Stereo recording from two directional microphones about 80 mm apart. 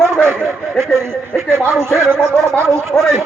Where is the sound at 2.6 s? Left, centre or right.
Right.